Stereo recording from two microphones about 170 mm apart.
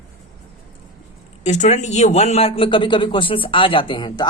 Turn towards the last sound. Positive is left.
turn(degrees=30)  # may be behind; listen again after turning